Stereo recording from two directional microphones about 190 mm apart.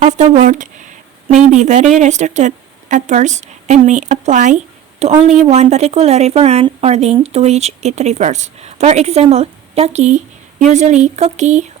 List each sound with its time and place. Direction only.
0.0 s speech: 40° right (ahead or behind)